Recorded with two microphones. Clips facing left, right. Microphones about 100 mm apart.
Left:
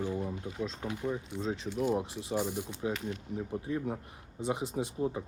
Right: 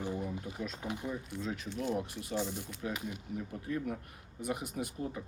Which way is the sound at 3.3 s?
25° left (ahead or behind).